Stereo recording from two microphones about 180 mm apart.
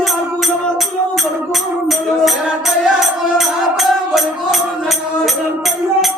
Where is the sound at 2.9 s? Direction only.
Centre (ahead or behind).